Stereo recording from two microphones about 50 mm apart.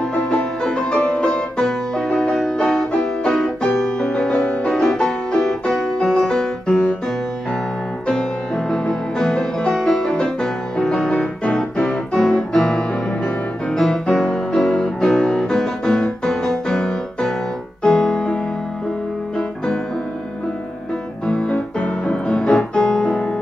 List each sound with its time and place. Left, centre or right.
0.1 s music: left; by 3.5 s centre
4.0 s music: left
8.1 s music: centre
14.1 s music: centre
17.8 s keyboard: centre
21.3 s music: left